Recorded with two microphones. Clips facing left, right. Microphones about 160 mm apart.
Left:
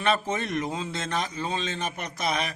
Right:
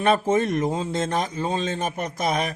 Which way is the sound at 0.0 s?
45° right (ahead or behind).